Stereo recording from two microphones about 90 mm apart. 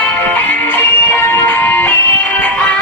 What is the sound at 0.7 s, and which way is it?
Music, 25° left (ahead or behind).